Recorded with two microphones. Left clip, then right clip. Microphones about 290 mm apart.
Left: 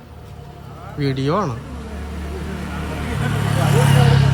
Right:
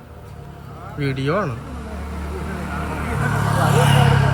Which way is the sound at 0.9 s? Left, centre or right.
Centre.